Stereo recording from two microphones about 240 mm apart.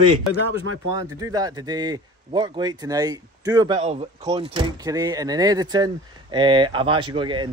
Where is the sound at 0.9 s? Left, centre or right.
Centre.